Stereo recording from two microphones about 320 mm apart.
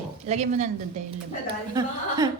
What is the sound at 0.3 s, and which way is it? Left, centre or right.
A woman's voice, right.